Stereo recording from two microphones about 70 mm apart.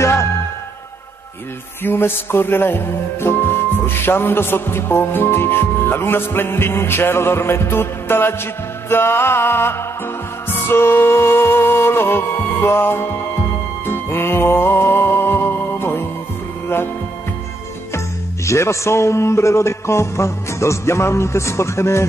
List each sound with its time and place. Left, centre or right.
0.0 s music: left
1.8 s music: left
17.9 s speech: left